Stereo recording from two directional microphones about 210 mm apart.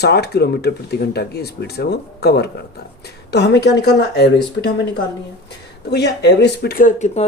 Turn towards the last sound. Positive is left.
turn(degrees=30)  # may be behind; listen again after turning